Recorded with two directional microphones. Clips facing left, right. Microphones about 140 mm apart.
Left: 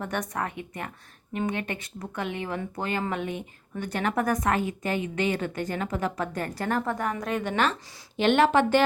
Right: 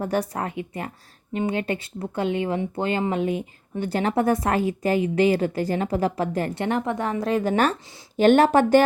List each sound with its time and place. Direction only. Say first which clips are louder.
0.0 s a woman's voice: right 5 dB; 30° right (ahead or behind)